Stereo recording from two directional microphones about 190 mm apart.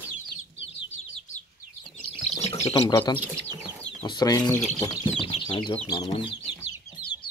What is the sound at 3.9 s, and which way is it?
Speech, 25° left (ahead or behind).